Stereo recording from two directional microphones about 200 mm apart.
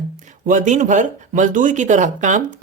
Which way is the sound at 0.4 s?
40° right (ahead or behind).